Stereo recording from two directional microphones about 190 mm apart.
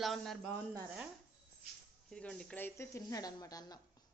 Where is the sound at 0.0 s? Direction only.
Centre (ahead or behind).